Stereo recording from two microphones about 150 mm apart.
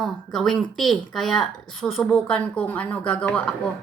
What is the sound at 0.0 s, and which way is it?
Speech, 5° left (ahead or behind).